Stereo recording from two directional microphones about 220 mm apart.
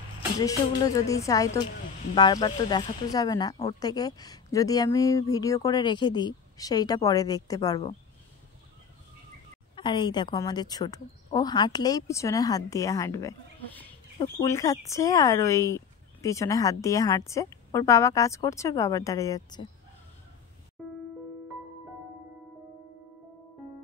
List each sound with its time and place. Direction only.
0.4 s speech: 15° left (ahead or behind)
9.8 s speech: 20° left (ahead or behind)